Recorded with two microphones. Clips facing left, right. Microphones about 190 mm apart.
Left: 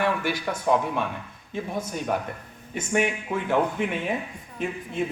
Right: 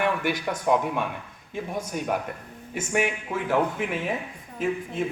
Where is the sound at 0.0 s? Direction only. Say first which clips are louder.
Even; 15° right (ahead or behind).